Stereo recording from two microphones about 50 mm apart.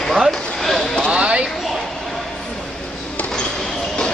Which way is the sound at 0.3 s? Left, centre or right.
Centre.